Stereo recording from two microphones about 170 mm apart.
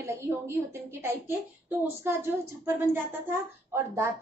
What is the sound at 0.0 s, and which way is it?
A woman's voice, 15° right (ahead or behind).